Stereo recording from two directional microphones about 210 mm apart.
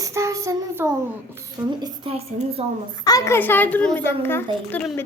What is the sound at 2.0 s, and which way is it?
Speech, 30° right (ahead or behind).